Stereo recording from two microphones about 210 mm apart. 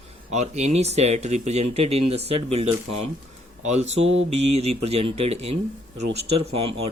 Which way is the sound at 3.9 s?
65° right (ahead or behind).